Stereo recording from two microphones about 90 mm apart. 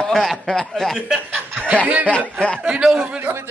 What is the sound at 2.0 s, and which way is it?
Speech, 15° left (ahead or behind).